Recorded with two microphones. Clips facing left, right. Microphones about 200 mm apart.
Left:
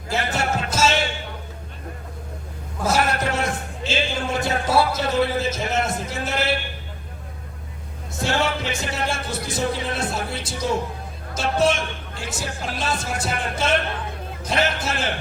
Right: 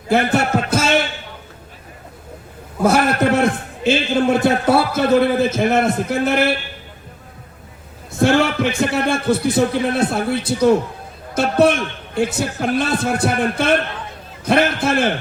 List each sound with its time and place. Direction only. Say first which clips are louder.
0.1 s a man's voice: right 8 dB; 60° right (ahead or behind)
2.8 s a man's voice: right 7 dB; 55° right (ahead or behind)
8.2 s a man's voice: right 8 dB; 55° right (ahead or behind)